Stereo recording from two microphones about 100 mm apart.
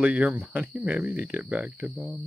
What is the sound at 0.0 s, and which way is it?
Speech, 15° right (ahead or behind).